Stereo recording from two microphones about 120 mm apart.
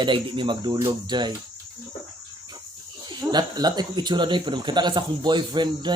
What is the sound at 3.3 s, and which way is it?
Speech, 35° right (ahead or behind).